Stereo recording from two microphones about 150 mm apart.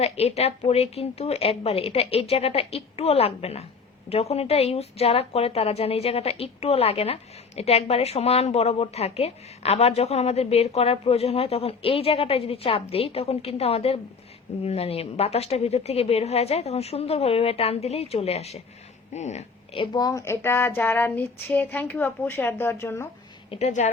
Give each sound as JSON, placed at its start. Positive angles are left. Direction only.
{"t": 0.0, "sound": "a woman's voice", "side_deg": 45}
{"t": 19.8, "sound": "female singing", "side_deg": 25}
{"t": 23.5, "sound": "a woman's voice", "side_deg": 45}